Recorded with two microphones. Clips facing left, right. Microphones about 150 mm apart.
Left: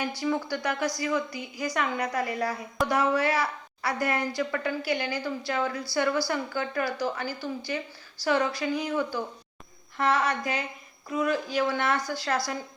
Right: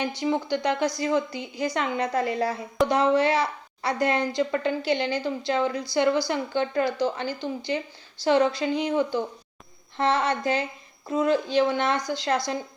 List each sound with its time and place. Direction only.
0.0 s a woman's voice: 20° right (ahead or behind)